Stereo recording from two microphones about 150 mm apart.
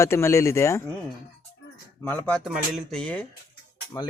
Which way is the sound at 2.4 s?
Centre (ahead or behind).